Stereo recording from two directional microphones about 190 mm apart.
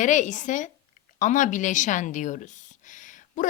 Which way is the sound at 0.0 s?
40° left (ahead or behind).